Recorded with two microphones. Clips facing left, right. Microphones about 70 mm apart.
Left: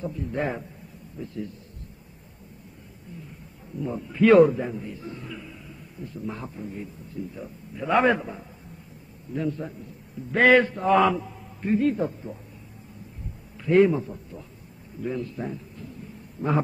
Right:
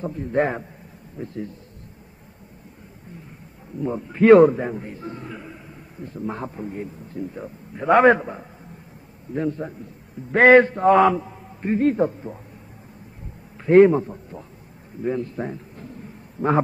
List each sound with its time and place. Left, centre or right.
0.0 s a man's voice: right
3.8 s a man's voice: right
11.1 s a sound: centre
11.7 s a man's voice: right
13.7 s a man's voice: right